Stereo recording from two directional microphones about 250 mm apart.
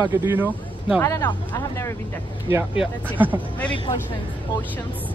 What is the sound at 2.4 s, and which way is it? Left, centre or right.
Speech, centre.